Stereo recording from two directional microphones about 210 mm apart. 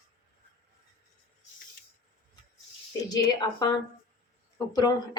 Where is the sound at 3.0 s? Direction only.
20° left (ahead or behind).